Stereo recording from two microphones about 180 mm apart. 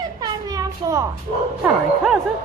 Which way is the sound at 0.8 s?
20° right (ahead or behind).